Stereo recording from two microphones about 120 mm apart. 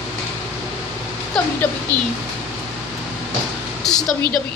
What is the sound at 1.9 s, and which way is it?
Speech, 25° right (ahead or behind).